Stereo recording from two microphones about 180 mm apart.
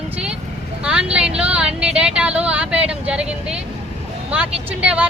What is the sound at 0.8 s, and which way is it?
Speech, 5° right (ahead or behind).